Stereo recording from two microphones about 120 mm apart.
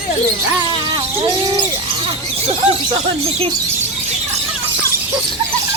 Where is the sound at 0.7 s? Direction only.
40° right (ahead or behind).